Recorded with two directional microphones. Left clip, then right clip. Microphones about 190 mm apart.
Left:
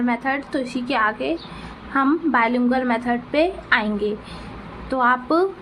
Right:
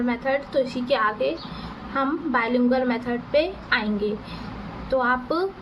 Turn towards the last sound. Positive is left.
turn(degrees=30)  # may be behind; listen again after turning